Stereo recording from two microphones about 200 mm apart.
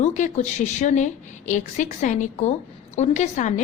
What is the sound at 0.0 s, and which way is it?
Speech, 35° left (ahead or behind).